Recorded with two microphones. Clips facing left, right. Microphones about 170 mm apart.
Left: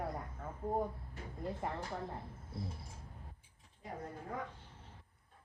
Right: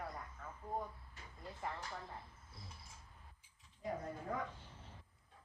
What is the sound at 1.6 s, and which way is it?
Speech, 30° left (ahead or behind).